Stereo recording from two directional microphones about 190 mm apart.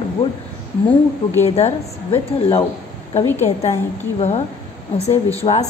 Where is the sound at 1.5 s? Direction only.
35° left (ahead or behind).